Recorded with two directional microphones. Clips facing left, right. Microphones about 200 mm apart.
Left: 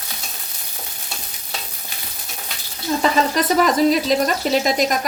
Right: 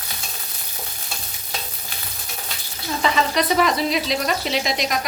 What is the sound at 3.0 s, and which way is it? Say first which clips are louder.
Speech: left 1 dB; 40° left (ahead or behind).